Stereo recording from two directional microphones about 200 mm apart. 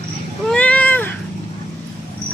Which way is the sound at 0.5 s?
5° left (ahead or behind).